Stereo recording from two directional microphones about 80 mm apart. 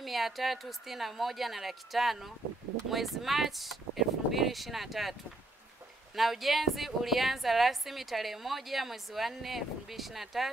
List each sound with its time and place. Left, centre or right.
0.0 s a woman's voice: centre
6.1 s a woman's voice: centre